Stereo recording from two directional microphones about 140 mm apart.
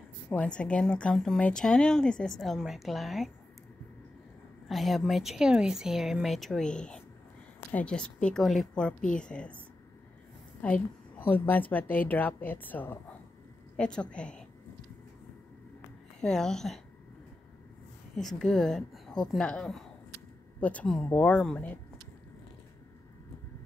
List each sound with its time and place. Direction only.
0.3 s a woman's voice: 10° left (ahead or behind)
4.6 s a woman's voice: centre (ahead or behind)
10.6 s a woman's voice: 10° left (ahead or behind)
16.2 s a woman's voice: 5° left (ahead or behind)
18.1 s a woman's voice: 5° left (ahead or behind)